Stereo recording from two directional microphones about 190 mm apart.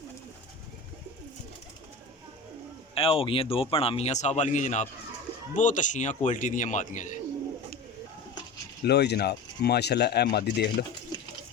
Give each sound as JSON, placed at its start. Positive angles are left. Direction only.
{"t": 2.9, "sound": "speech", "side_deg": 30}
{"t": 8.8, "sound": "speech", "side_deg": 60}